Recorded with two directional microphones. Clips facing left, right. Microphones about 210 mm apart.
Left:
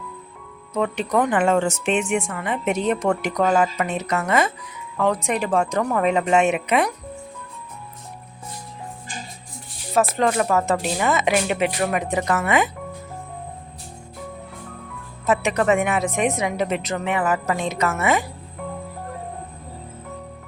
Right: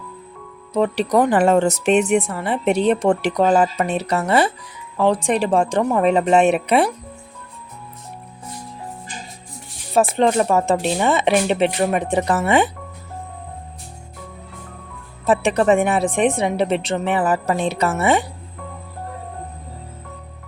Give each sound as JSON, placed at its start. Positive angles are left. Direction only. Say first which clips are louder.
{"t": 0.7, "sound": "speech", "louder": "right 4 dB", "side_deg": -35}
{"t": 10.2, "sound": "speech", "louder": "right 3 dB", "side_deg": -25}
{"t": 15.3, "sound": "speech", "louder": "right 3 dB", "side_deg": -30}